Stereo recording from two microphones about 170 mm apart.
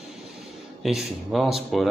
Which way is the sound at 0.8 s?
Centre (ahead or behind).